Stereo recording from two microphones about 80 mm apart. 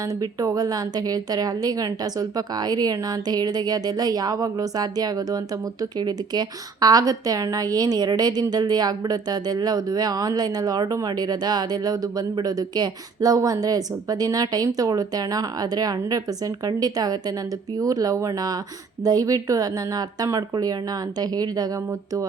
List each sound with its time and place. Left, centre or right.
0.0 s a woman's voice: right